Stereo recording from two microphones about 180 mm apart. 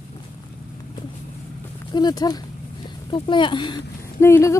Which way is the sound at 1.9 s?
20° left (ahead or behind).